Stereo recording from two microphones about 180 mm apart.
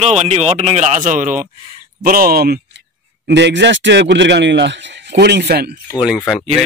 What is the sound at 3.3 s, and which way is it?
Speech, 75° right (ahead or behind).